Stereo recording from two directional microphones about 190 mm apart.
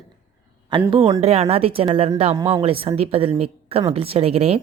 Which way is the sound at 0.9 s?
25° right (ahead or behind).